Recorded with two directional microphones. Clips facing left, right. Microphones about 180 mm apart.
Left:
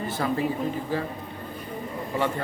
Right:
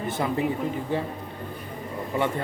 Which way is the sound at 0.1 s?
20° right (ahead or behind).